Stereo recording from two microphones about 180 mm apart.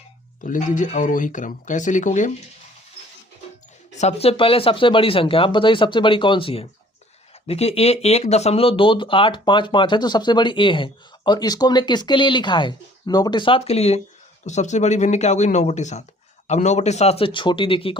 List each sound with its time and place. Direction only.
0.4 s speech: 45° left (ahead or behind)
3.9 s speech: 35° left (ahead or behind)